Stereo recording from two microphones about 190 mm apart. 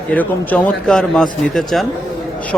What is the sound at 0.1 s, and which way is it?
A man's voice, 5° left (ahead or behind).